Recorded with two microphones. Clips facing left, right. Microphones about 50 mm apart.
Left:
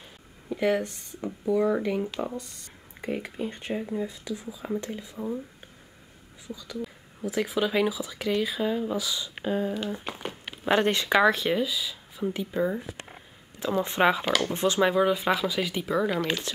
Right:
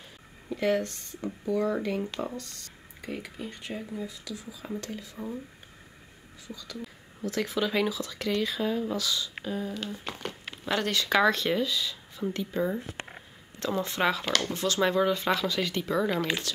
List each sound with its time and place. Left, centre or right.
0.5 s speech: centre
2.3 s speech: centre
6.4 s speech: centre
11.1 s speech: centre
13.8 s speech: left; by 16.3 s centre